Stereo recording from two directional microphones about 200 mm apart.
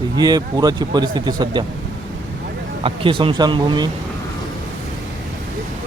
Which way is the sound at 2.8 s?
25° right (ahead or behind).